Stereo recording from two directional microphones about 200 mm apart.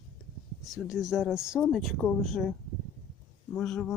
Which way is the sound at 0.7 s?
Centre (ahead or behind).